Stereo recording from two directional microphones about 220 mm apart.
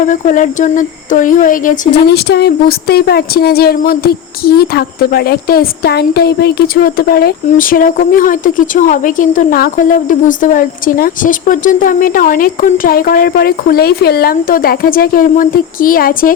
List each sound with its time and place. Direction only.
0.0 s speech: 35° left (ahead or behind)